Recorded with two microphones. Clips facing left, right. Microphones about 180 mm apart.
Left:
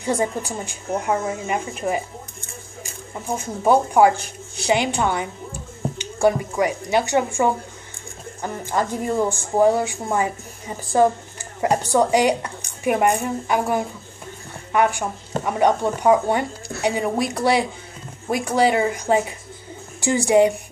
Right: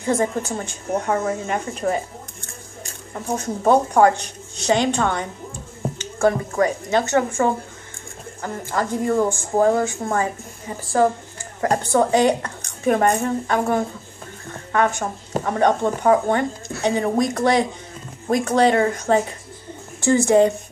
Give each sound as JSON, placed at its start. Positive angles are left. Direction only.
{"t": 0.0, "sound": "speech", "side_deg": 15}
{"t": 11.6, "sound": "speech", "side_deg": 15}
{"t": 14.5, "sound": "a sound", "side_deg": 10}
{"t": 15.4, "sound": "speech", "side_deg": 10}